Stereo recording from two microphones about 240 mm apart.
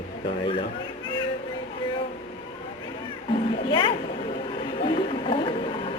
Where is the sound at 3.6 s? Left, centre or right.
Centre.